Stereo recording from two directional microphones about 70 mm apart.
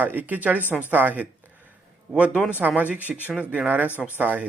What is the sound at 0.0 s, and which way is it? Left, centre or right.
Speech, right.